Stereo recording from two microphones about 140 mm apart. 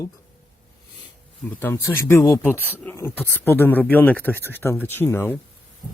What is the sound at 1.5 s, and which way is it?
Speech, 15° left (ahead or behind).